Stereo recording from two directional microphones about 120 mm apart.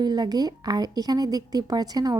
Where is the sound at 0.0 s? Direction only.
35° right (ahead or behind).